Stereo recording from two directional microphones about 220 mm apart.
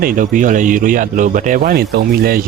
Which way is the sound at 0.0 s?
35° right (ahead or behind).